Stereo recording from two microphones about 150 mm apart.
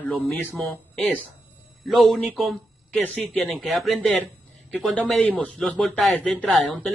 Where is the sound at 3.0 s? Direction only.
5° left (ahead or behind).